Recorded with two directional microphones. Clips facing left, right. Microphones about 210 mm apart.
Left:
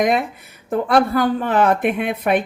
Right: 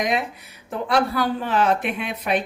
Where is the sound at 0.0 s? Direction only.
55° left (ahead or behind).